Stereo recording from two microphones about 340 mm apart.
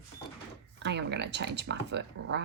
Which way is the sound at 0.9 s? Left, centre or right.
Right.